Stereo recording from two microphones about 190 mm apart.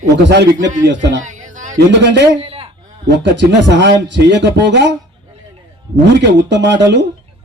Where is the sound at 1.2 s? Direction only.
40° right (ahead or behind).